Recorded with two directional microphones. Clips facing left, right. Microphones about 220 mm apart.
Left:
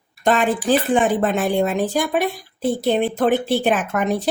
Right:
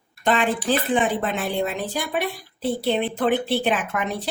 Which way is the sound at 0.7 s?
45° left (ahead or behind).